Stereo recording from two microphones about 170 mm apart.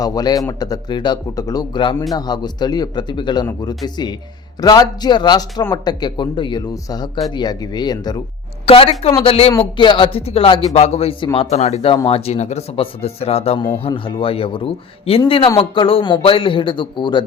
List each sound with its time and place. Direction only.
0.0 s speech: 20° left (ahead or behind)